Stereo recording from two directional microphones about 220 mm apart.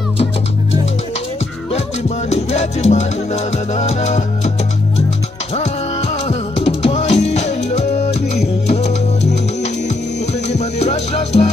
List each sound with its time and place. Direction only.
1.7 s music: 30° left (ahead or behind)
6.2 s music: 25° left (ahead or behind)
10.6 s music: 30° left (ahead or behind)